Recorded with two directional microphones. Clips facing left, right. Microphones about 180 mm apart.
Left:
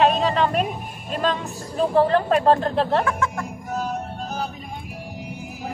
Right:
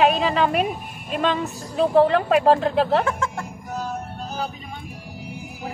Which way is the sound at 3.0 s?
25° right (ahead or behind).